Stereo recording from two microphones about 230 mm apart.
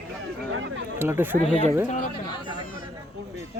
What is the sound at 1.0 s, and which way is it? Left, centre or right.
Speech, centre.